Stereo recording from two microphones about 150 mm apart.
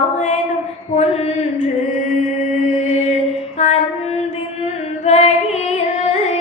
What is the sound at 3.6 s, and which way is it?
Female singing, 50° left (ahead or behind).